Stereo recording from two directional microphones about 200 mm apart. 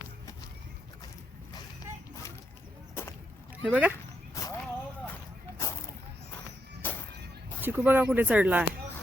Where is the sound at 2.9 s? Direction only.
15° left (ahead or behind).